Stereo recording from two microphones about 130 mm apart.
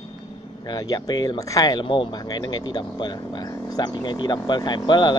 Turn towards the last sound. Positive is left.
turn(degrees=35)  # may be behind; listen again after turning